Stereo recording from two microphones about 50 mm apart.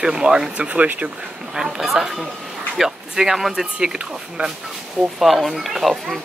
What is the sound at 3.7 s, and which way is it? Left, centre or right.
Speech, centre.